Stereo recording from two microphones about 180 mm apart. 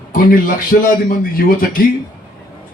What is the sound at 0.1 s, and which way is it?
A man's voice, 50° left (ahead or behind).